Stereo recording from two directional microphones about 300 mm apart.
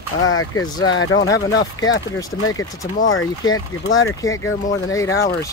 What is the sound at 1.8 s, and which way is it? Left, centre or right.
Speech, left.